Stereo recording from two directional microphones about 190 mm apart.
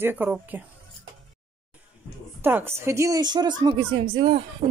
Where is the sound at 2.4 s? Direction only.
10° right (ahead or behind).